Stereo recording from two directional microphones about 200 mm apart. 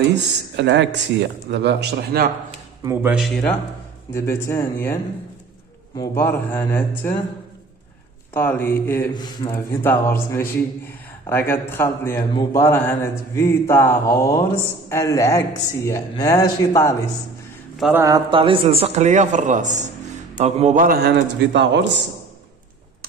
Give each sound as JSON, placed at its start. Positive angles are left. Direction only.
{"t": 0.1, "sound": "speech", "side_deg": -60}
{"t": 2.8, "sound": "speech", "side_deg": -10}
{"t": 4.1, "sound": "a man's voice", "side_deg": 15}
{"t": 5.9, "sound": "a man's voice", "side_deg": 10}
{"t": 8.4, "sound": "a man's voice", "side_deg": 10}
{"t": 17.9, "sound": "a man's voice", "side_deg": -15}